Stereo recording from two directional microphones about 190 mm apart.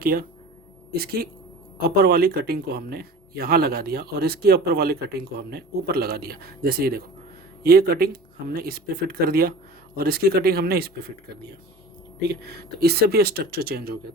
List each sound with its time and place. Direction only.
0.0 s speech: 50° right (ahead or behind)